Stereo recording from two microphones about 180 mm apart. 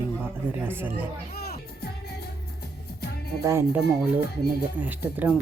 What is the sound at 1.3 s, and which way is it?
Music, 60° left (ahead or behind).